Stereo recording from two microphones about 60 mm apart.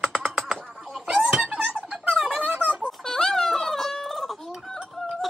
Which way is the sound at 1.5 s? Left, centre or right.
Centre.